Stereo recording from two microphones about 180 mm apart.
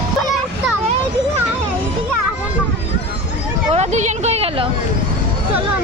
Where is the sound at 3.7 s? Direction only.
40° right (ahead or behind).